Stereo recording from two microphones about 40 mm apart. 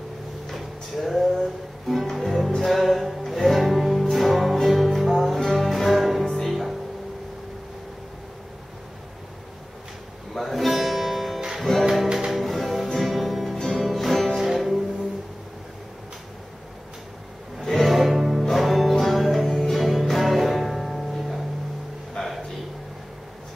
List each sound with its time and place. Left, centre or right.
0.5 s music: centre
10.3 s music: centre
17.6 s music: centre
22.2 s a sound: centre